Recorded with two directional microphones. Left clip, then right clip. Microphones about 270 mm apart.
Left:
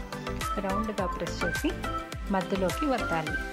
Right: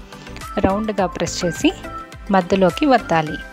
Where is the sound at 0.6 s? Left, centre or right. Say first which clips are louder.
Right 15 dB; right.